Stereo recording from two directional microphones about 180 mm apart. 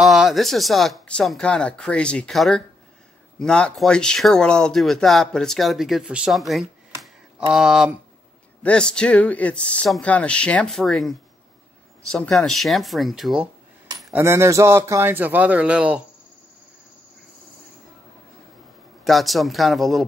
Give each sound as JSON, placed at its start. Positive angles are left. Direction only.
{"t": 0.0, "sound": "speech", "side_deg": 0}
{"t": 19.0, "sound": "speech", "side_deg": 0}